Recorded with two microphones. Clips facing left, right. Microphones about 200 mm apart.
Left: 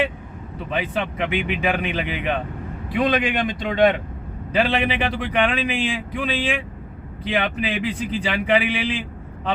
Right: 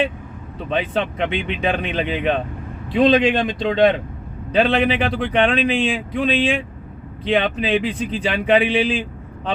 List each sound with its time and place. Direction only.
0.7 s speech: 25° right (ahead or behind)
4.9 s speech: 20° left (ahead or behind)
5.2 s speech: 25° right (ahead or behind)